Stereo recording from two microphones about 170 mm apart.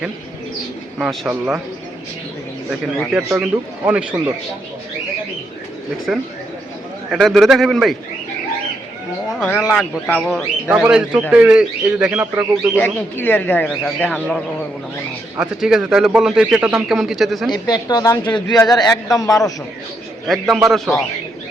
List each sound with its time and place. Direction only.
0.9 s speech: 5° right (ahead or behind)
2.8 s speech: centre (ahead or behind)
3.2 s a man's voice: 10° right (ahead or behind)
6.1 s speech: 5° right (ahead or behind)
9.3 s a man's voice: centre (ahead or behind)
12.7 s speech: 10° left (ahead or behind)
15.4 s speech: 5° right (ahead or behind)
17.5 s speech: 25° left (ahead or behind)
18.4 s speech: 5° left (ahead or behind)
18.7 s speech: 20° left (ahead or behind)
20.2 s speech: centre (ahead or behind)